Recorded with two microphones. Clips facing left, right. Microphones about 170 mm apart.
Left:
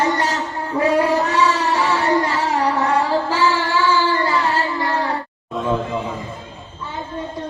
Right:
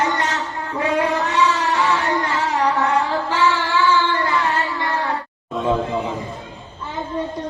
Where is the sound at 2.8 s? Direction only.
35° left (ahead or behind).